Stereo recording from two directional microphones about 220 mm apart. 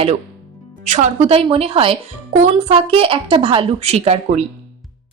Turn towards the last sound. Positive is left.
turn(degrees=-30)  # may be behind; listen again after turning